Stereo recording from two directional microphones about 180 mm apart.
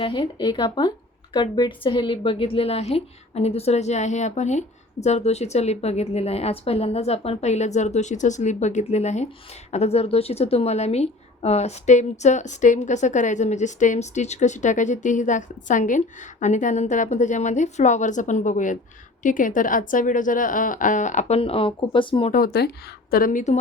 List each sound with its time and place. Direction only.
0.0 s a woman's voice: 25° left (ahead or behind)
22.3 s a woman's voice: 55° left (ahead or behind)